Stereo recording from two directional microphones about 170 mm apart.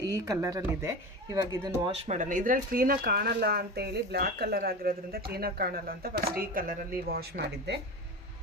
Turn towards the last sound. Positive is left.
turn(degrees=-70)  # may be behind; listen again after turning